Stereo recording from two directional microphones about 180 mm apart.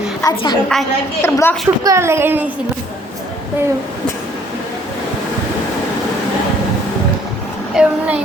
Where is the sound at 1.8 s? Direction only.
15° right (ahead or behind).